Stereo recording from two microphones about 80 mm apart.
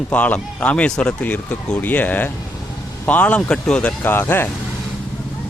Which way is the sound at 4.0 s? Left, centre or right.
Left.